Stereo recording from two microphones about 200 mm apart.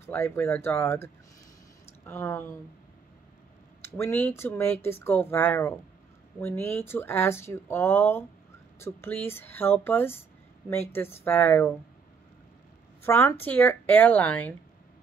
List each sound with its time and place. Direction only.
0.0 s speech: 10° left (ahead or behind)
3.8 s speech: 10° left (ahead or behind)
13.0 s speech: 10° left (ahead or behind)